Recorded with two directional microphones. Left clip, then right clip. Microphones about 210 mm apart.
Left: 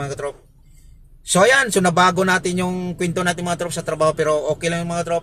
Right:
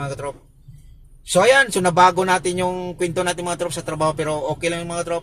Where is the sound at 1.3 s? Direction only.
25° left (ahead or behind).